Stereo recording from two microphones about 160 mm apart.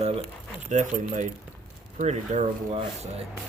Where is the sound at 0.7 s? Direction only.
50° right (ahead or behind).